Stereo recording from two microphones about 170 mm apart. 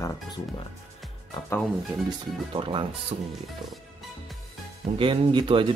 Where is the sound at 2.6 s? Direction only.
30° right (ahead or behind).